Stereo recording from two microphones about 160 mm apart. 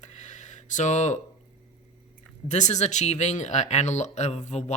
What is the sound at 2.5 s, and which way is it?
Speech, 45° left (ahead or behind).